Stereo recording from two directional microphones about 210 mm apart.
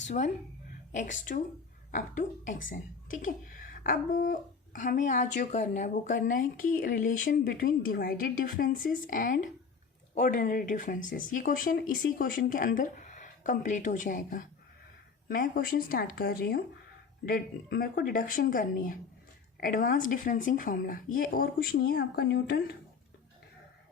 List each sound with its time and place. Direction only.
0.2 s speech: 35° left (ahead or behind)